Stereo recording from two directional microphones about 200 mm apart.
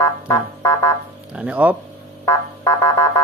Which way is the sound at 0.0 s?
10° left (ahead or behind).